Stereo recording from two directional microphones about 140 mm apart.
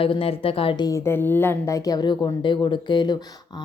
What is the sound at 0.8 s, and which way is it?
Speech, 20° left (ahead or behind).